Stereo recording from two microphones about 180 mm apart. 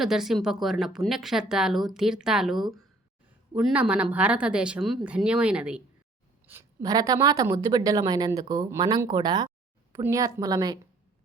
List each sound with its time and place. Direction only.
0.0 s speech: centre (ahead or behind)
6.5 s speech: 15° right (ahead or behind)